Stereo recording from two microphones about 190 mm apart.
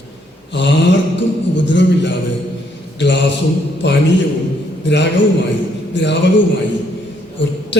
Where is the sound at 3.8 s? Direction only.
65° left (ahead or behind).